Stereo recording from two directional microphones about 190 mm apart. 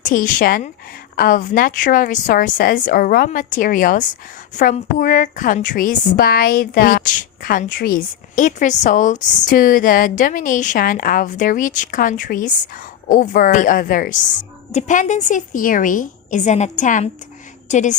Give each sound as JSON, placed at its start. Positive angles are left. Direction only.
{"t": 0.0, "sound": "a woman's voice", "side_deg": 45}